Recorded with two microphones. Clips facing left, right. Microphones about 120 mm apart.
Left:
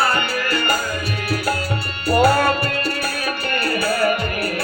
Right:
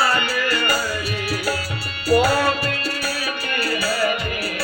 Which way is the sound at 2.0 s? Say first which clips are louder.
Left 2 dB; 55° left (ahead or behind).